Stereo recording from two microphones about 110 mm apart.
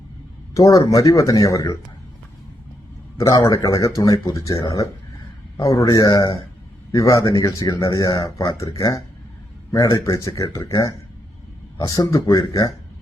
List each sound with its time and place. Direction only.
0.5 s speech: 30° left (ahead or behind)
3.2 s speech: 30° left (ahead or behind)
6.9 s speech: 30° left (ahead or behind)